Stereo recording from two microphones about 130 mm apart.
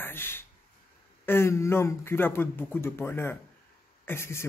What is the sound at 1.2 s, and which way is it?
A man's voice, 20° left (ahead or behind).